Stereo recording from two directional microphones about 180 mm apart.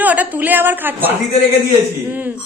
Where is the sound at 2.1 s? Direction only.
10° right (ahead or behind).